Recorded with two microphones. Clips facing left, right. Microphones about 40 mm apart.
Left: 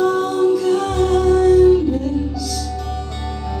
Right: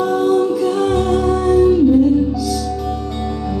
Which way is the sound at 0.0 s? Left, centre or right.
Centre.